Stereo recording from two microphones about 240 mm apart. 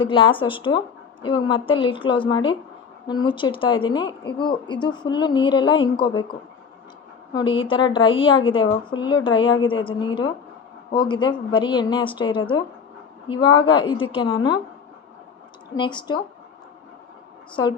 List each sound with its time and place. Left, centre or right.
0.0 s speech: left
7.3 s a woman's voice: left
15.7 s speech: centre
17.5 s a woman's voice: centre